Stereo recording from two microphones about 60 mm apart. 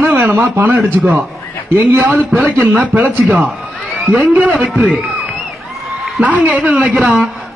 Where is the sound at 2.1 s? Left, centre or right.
Right.